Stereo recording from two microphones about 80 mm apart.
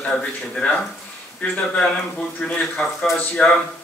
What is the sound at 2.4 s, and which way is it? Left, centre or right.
A man's voice, centre.